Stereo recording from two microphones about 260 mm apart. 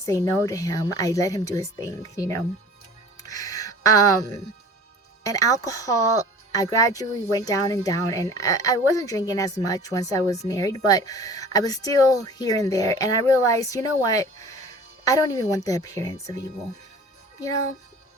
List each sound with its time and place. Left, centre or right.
0.0 s speech: centre
3.2 s a sound: centre
5.2 s speech: centre